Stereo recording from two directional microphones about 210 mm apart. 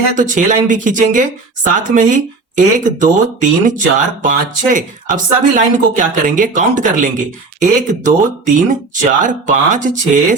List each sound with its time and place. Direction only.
0.2 s speech: 35° right (ahead or behind)